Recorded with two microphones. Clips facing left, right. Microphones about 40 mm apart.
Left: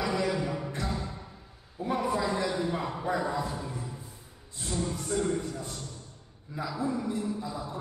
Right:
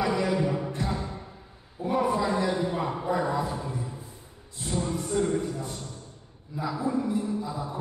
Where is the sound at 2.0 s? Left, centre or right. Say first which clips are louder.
Right 4 dB; centre.